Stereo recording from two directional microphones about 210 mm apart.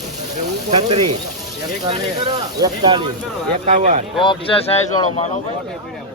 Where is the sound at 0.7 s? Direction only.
30° right (ahead or behind).